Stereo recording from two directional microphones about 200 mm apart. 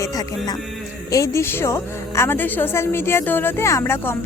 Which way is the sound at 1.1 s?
15° left (ahead or behind).